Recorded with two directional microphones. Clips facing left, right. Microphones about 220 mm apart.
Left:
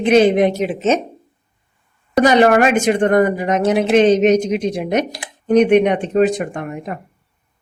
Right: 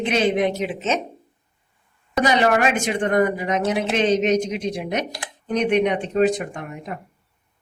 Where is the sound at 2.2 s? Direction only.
55° left (ahead or behind).